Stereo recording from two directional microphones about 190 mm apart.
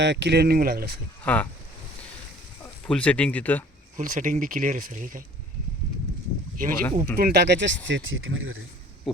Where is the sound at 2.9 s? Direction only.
5° left (ahead or behind).